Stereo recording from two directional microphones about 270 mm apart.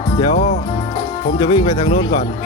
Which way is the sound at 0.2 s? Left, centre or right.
Left.